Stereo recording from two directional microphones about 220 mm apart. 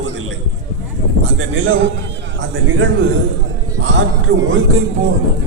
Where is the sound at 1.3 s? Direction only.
60° right (ahead or behind).